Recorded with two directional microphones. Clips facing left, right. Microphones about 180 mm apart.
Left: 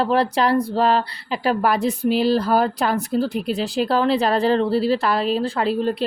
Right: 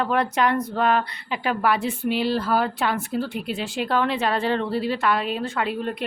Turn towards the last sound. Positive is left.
turn(degrees=30)  # may be behind; listen again after turning